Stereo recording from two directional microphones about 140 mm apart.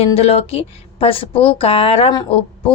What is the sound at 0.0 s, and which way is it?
A woman's voice, 45° left (ahead or behind).